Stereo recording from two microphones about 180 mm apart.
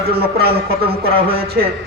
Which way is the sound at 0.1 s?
60° right (ahead or behind).